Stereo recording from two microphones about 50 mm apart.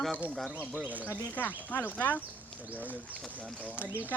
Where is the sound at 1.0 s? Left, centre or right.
Left.